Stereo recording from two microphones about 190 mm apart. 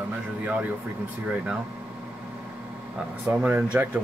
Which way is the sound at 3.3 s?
5° right (ahead or behind).